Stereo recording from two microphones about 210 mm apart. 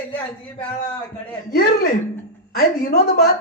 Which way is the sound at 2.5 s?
45° left (ahead or behind).